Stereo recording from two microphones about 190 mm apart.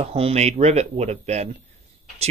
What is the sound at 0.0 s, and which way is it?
Speech, 35° right (ahead or behind).